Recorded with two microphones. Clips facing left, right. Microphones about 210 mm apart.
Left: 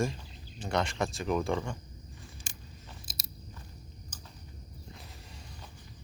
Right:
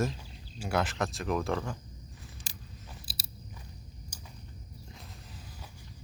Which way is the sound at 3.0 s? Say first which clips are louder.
Even; 35° right (ahead or behind).